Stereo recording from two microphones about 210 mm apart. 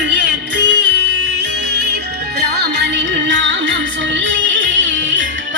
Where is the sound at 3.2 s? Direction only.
60° right (ahead or behind).